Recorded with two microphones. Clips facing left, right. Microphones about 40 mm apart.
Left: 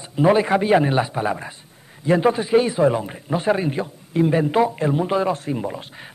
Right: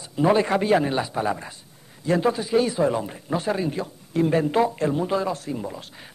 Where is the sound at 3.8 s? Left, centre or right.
Centre.